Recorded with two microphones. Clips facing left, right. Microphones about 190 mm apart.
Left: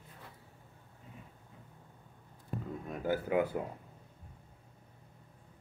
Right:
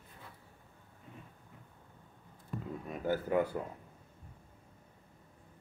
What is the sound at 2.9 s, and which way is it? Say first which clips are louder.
Speech: even; 5° left (ahead or behind).